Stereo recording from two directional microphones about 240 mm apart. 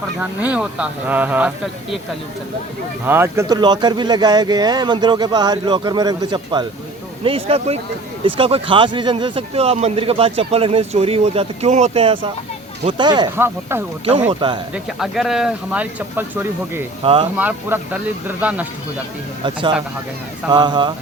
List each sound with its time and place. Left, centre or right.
0.2 s speech: centre
3.1 s a man's voice: centre
14.8 s speech: centre
17.0 s a man's voice: right
17.3 s speech: centre
20.5 s speech: centre